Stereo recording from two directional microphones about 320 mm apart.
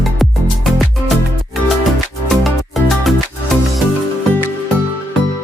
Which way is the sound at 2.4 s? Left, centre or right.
Centre.